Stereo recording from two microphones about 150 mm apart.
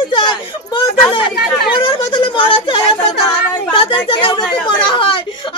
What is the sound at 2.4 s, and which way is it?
Speech, 35° left (ahead or behind).